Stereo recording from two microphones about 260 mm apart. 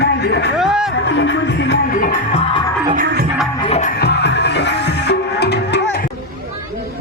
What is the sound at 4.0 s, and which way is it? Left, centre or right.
Music, left.